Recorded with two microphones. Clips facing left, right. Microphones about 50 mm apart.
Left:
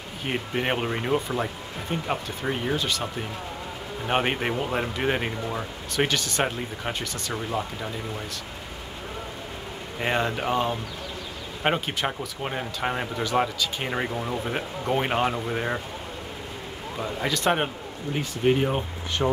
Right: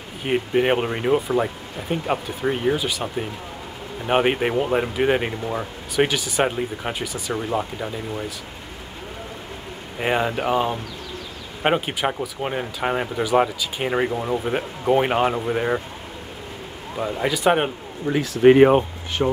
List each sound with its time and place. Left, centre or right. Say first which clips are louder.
0.2 s speech: right 8 dB; centre
9.9 s speech: right 4 dB; centre
17.0 s speech: right 5 dB; centre
18.2 s speech: right 11 dB; right
19.2 s speech: right 3 dB; centre